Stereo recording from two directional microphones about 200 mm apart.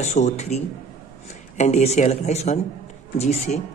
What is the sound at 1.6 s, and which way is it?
Speech, 35° left (ahead or behind).